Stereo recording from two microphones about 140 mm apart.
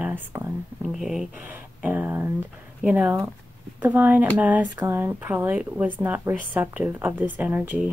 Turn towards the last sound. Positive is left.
turn(degrees=-10)  # may be behind; listen again after turning